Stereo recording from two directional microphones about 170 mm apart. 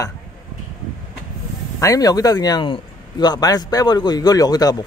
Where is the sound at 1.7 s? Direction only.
20° left (ahead or behind).